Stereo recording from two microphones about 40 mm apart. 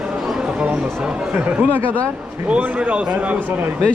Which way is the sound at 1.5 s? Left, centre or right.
Right.